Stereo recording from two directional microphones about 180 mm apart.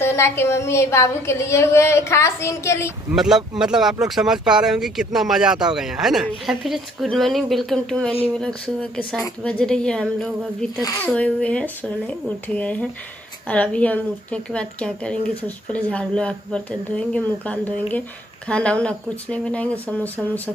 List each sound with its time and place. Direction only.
0.0 s a woman's voice: 15° left (ahead or behind)
3.1 s speech: centre (ahead or behind)
10.8 s a woman's voice: 15° left (ahead or behind)